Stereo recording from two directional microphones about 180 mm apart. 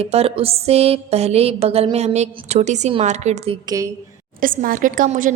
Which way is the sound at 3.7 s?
20° right (ahead or behind).